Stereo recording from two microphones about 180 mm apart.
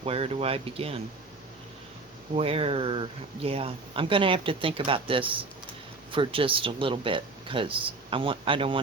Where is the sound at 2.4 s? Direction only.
30° right (ahead or behind).